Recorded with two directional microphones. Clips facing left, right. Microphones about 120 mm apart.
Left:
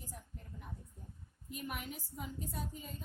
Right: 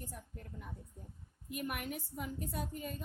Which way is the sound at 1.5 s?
60° right (ahead or behind).